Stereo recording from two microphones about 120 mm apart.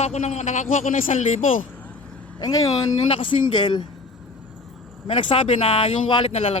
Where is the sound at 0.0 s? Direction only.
70° left (ahead or behind); by 1.5 s 90° left.